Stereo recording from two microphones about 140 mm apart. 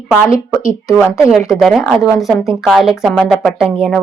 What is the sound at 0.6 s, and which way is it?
Speech, 25° left (ahead or behind).